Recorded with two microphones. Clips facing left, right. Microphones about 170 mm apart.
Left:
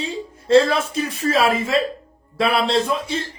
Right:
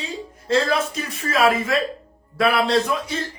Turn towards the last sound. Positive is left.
turn(degrees=30)  # may be behind; listen again after turning